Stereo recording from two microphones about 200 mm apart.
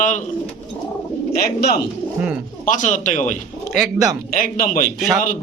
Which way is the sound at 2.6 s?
40° left (ahead or behind).